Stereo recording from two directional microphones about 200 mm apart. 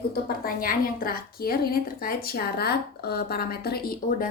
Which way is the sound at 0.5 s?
45° left (ahead or behind).